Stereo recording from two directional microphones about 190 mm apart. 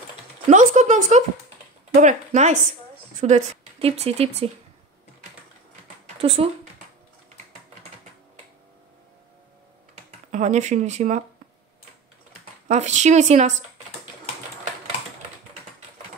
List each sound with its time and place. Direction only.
0.5 s speech: 40° right (ahead or behind)
6.2 s speech: 30° right (ahead or behind)
10.3 s speech: 40° right (ahead or behind)
12.6 s speech: 35° right (ahead or behind)